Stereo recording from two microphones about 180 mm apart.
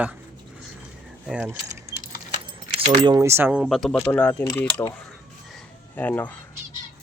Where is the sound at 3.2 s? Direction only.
15° right (ahead or behind); by 4.9 s 10° left (ahead or behind).